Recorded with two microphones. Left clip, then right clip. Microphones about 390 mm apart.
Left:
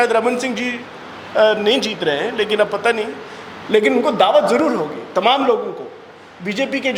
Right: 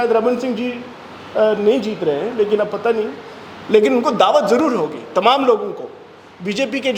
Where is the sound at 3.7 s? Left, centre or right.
Centre.